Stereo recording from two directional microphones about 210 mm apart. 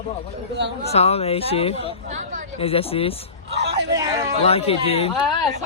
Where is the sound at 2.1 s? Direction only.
35° right (ahead or behind).